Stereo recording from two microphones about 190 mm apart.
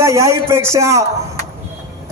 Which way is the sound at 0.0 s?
15° right (ahead or behind).